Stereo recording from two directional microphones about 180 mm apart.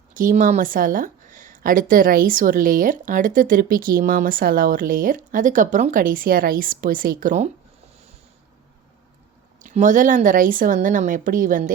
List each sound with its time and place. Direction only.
0.1 s speech: 50° right (ahead or behind)
9.6 s speech: 45° right (ahead or behind)